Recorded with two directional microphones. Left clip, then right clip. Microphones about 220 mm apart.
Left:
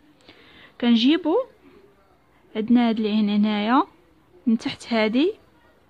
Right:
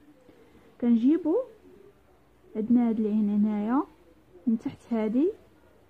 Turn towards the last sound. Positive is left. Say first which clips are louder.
# left 6 dB
turn(degrees=10)  # may be behind; listen again after turning